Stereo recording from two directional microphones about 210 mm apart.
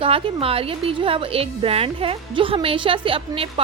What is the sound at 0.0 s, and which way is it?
A woman's voice, 25° right (ahead or behind).